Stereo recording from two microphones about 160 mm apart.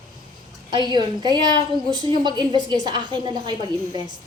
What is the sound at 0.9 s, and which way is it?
A woman's voice, 25° right (ahead or behind).